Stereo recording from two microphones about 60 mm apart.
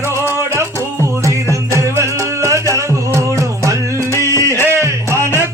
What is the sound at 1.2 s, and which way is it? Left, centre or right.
Music, right.